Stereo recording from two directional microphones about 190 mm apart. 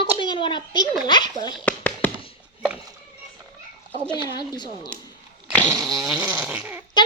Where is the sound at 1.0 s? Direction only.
20° left (ahead or behind).